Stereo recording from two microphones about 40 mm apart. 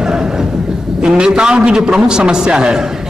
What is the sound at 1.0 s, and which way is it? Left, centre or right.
A man's voice, centre.